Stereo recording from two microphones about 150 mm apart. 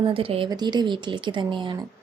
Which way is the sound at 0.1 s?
40° right (ahead or behind).